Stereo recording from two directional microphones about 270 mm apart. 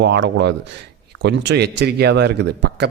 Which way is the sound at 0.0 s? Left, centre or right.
Right.